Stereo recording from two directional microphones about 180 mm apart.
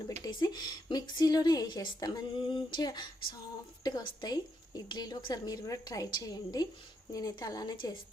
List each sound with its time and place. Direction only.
0.3 s a woman's voice: 25° left (ahead or behind)